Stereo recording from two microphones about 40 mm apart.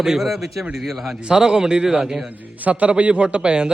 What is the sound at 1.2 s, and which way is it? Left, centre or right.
A man's voice, centre.